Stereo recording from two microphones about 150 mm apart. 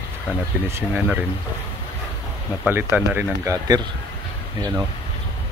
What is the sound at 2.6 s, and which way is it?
Speech, 15° right (ahead or behind).